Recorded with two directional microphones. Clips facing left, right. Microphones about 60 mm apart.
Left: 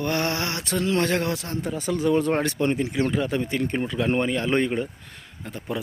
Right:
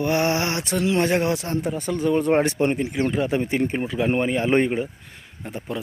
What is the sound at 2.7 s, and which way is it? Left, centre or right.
Speech, centre.